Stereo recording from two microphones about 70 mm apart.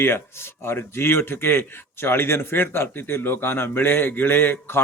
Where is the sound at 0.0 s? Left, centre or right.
Left.